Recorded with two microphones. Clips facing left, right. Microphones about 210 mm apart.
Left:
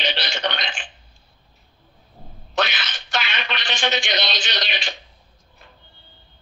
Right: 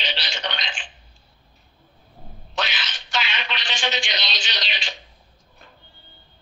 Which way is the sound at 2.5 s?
55° left (ahead or behind).